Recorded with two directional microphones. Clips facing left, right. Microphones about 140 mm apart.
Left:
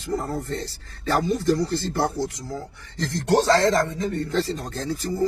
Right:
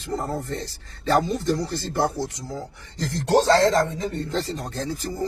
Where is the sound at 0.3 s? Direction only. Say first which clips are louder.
Even; 20° right (ahead or behind).